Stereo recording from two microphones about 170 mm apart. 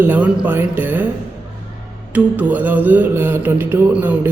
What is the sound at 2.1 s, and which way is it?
A woman's voice, 10° right (ahead or behind).